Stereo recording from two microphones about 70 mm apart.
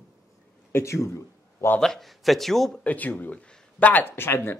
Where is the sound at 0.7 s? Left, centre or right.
Left.